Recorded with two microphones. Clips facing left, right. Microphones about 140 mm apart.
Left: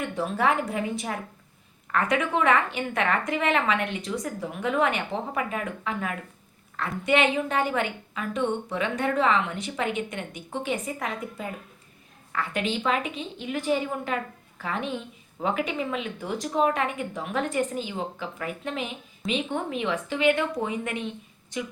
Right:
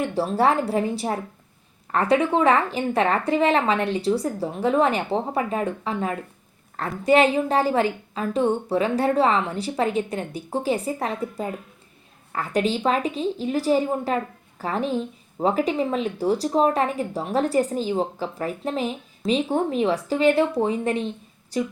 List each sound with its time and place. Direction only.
0.0 s a woman's voice: 30° right (ahead or behind)